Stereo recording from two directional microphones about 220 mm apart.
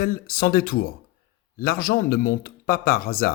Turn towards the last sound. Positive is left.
turn(degrees=40)  # may be behind; listen again after turning